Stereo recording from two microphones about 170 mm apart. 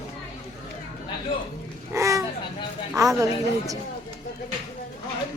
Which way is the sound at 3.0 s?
20° right (ahead or behind).